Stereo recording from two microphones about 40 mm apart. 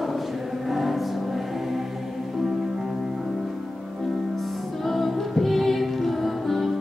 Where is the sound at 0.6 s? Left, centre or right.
Centre.